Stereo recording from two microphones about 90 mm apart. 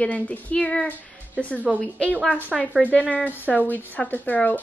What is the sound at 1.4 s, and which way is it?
Speech, 15° right (ahead or behind).